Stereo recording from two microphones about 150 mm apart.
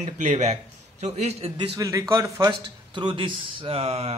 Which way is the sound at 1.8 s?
20° right (ahead or behind).